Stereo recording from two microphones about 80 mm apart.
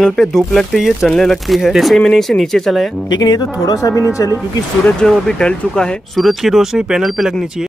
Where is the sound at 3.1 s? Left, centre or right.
Left.